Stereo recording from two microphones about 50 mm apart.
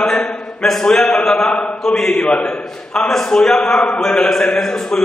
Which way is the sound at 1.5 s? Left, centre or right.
Left.